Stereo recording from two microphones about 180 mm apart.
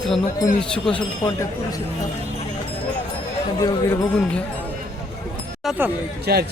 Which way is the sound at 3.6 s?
20° left (ahead or behind).